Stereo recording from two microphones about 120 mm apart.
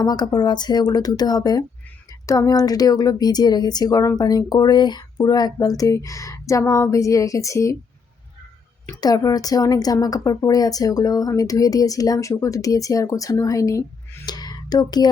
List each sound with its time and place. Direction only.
0.0 s a woman's voice: 35° left (ahead or behind)
9.0 s a woman's voice: 30° left (ahead or behind)
14.3 s whispering: 35° left (ahead or behind)